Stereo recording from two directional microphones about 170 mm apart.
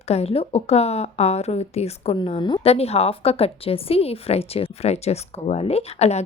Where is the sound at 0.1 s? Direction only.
35° left (ahead or behind).